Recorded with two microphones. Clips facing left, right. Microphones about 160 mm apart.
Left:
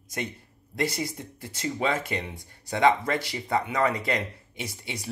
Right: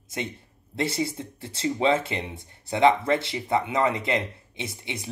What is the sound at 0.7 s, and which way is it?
Speech, 25° right (ahead or behind).